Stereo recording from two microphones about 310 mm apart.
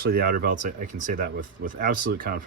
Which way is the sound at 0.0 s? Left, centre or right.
Right.